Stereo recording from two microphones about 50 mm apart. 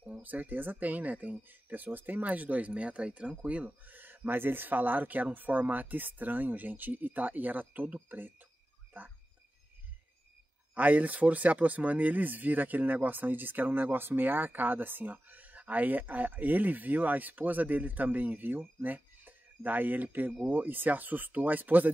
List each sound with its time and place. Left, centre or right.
0.2 s speech: right
10.7 s speech: right